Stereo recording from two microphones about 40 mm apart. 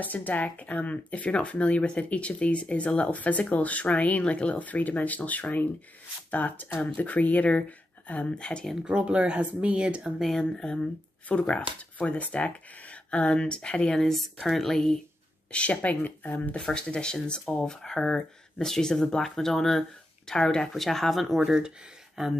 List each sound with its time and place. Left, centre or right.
0.0 s speech: left
8.8 s speech: right
10.3 s speech: centre
13.9 s speech: centre
15.5 s speech: left
16.0 s speech: left
16.5 s speech: left
20.6 s speech: centre
22.2 s speech: centre